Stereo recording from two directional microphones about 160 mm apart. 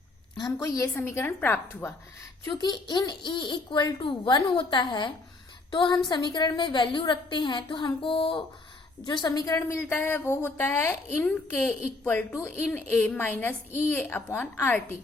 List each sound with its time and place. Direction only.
0.3 s a woman's voice: 25° left (ahead or behind)
2.4 s a child's voice: 25° left (ahead or behind)
12.4 s a woman's voice: 10° left (ahead or behind)